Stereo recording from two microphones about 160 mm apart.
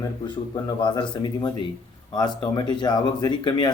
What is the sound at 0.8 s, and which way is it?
Speech, 30° left (ahead or behind).